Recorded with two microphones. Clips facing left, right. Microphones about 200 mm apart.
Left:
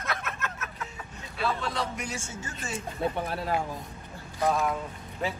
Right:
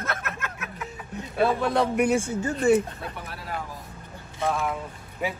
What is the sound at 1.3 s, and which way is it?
A man's voice, 55° right (ahead or behind).